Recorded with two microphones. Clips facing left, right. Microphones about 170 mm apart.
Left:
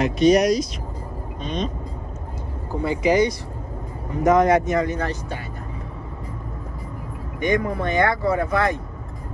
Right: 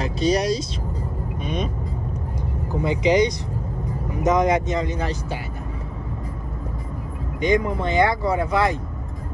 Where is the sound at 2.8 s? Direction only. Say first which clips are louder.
Even; 20° right (ahead or behind).